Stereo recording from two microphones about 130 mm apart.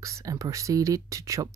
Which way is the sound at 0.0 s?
25° right (ahead or behind).